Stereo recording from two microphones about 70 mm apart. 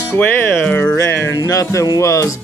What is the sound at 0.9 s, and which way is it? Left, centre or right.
Music, left.